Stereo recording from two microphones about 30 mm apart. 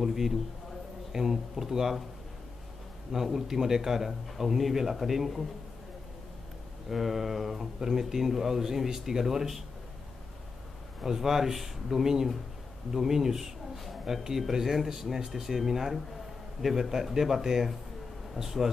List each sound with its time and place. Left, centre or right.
0.0 s speech: centre
3.1 s speech: centre
6.9 s speech: centre
11.1 s speech: centre